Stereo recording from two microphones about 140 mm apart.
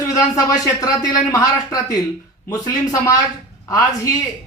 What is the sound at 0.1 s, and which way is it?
Speech, 25° left (ahead or behind).